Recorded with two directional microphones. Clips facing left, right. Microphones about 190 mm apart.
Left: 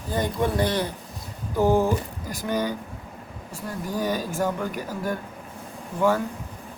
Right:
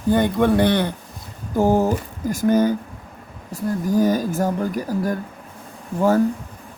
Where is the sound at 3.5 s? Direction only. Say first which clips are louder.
Right 9 dB; 45° right (ahead or behind).